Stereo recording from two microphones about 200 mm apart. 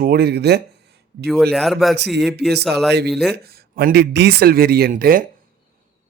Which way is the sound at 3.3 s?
50° right (ahead or behind).